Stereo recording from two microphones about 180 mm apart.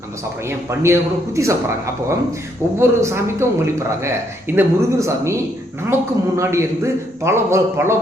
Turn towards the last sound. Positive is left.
turn(degrees=-15)  # may be behind; listen again after turning